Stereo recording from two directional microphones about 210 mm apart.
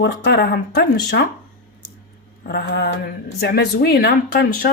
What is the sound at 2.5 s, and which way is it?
Mantra, 55° left (ahead or behind).